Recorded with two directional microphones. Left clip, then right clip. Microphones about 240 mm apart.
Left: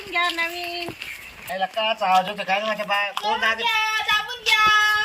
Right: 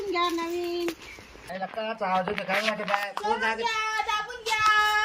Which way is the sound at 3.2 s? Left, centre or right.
Centre.